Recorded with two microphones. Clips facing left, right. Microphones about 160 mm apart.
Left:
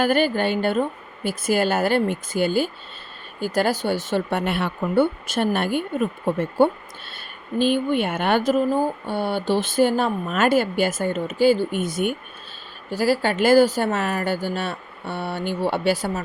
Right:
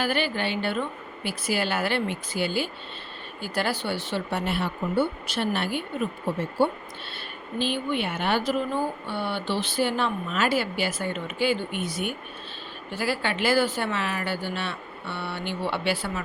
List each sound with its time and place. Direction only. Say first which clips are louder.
0.0 s speech: left 7 dB; 45° left (ahead or behind)